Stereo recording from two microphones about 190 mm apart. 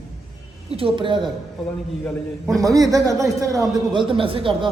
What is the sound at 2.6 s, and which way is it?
A man's voice, 20° right (ahead or behind).